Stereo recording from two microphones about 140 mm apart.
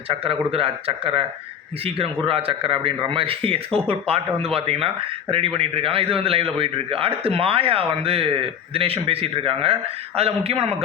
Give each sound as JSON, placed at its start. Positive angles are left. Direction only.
{"t": 0.1, "sound": "speech", "side_deg": -40}
{"t": 2.2, "sound": "a man's voice", "side_deg": -40}